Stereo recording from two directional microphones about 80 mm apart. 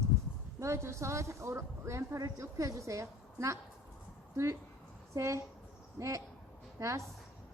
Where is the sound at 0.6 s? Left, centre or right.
Right.